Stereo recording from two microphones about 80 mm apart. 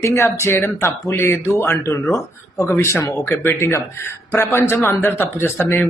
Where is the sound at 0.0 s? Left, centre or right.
Left.